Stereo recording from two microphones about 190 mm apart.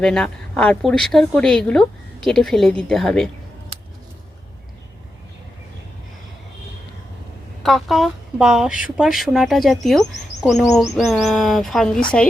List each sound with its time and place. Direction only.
0.0 s speech: 5° left (ahead or behind)
3.7 s a sound: 30° right (ahead or behind)
7.6 s speech: centre (ahead or behind)